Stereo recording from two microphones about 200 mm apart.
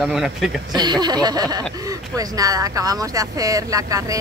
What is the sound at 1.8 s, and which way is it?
Speech, 20° right (ahead or behind).